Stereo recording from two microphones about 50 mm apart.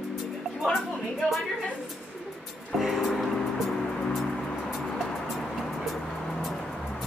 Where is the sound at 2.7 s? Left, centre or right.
Centre.